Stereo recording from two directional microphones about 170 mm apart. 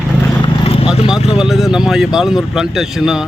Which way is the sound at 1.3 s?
Centre (ahead or behind).